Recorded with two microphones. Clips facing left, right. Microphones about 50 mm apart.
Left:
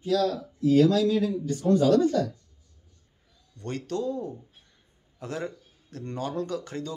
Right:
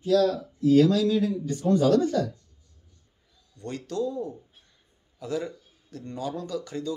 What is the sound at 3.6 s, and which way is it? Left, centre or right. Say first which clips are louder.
Speech: even; left.